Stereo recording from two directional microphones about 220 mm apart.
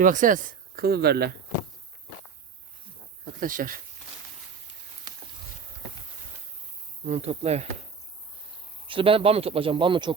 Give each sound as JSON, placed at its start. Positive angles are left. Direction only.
{"t": 0.0, "sound": "speech", "side_deg": -35}
{"t": 3.4, "sound": "speech", "side_deg": -40}
{"t": 7.0, "sound": "speech", "side_deg": -30}
{"t": 8.9, "sound": "speech", "side_deg": -25}